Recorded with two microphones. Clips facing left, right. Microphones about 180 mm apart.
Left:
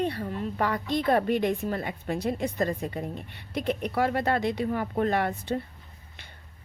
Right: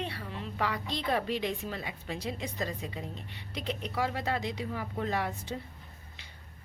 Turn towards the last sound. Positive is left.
turn(degrees=60)  # may be behind; listen again after turning